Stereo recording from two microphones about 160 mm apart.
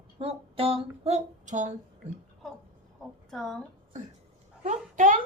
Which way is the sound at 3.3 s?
5° left (ahead or behind).